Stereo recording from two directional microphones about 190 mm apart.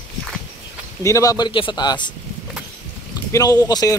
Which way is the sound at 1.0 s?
15° left (ahead or behind).